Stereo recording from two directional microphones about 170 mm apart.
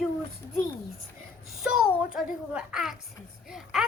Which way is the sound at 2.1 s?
5° right (ahead or behind).